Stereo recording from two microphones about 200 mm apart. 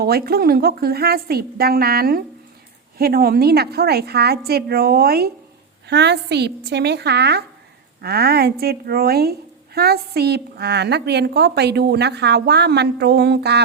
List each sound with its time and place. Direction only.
0.0 s a woman's voice: 50° right (ahead or behind)